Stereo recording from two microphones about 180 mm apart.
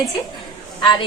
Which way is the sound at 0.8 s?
25° left (ahead or behind).